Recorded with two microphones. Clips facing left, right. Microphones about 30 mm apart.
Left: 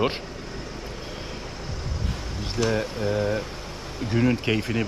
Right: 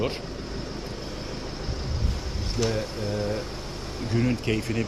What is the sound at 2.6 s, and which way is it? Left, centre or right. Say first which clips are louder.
Speech: left 2 dB; left.